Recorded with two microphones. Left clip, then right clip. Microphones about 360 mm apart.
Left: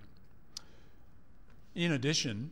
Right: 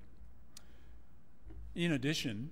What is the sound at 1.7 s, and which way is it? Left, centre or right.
Speech, left.